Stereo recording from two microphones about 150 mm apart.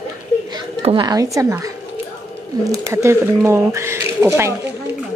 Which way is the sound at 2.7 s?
20° right (ahead or behind).